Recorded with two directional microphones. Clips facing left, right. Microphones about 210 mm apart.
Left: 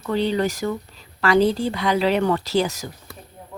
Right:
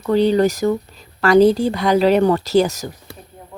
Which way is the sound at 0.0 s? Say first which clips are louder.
Right 7 dB; 40° right (ahead or behind).